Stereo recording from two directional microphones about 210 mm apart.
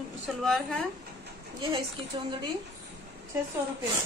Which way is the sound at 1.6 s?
25° right (ahead or behind).